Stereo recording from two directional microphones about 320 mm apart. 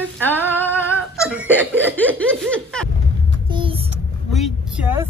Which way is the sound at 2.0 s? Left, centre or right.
Centre.